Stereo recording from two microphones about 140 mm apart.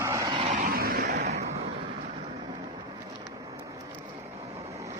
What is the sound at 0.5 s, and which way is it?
Vehicle, 90° right.